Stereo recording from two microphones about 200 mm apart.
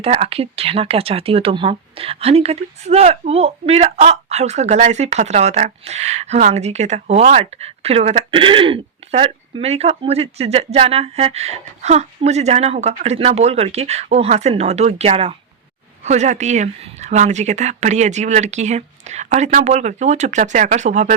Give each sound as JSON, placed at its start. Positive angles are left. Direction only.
{"t": 0.0, "sound": "speech", "side_deg": -30}